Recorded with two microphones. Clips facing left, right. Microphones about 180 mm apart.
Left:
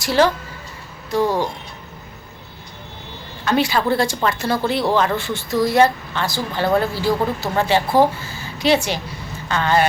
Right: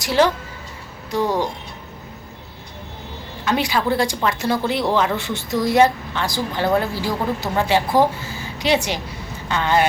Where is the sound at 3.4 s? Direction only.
15° right (ahead or behind).